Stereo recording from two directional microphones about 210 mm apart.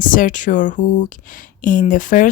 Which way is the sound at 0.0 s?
40° left (ahead or behind).